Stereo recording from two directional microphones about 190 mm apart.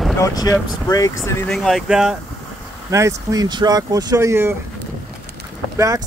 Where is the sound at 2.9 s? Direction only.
15° right (ahead or behind).